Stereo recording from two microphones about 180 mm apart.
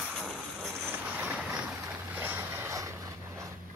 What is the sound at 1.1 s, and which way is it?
Vehicle, 5° right (ahead or behind).